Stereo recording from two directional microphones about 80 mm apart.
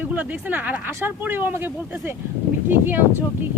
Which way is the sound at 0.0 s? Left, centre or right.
Right.